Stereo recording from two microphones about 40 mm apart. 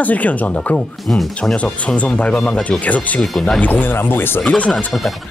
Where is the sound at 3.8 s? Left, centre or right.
Left.